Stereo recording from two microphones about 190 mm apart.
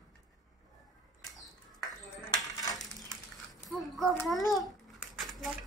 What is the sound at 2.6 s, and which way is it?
Coin, 20° left (ahead or behind).